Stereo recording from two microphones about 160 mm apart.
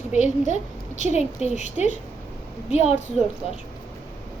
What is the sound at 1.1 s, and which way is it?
Speech, 45° left (ahead or behind).